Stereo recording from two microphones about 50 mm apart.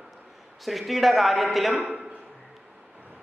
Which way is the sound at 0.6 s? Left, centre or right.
Centre.